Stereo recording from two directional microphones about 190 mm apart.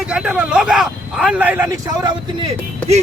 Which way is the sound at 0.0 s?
5° right (ahead or behind).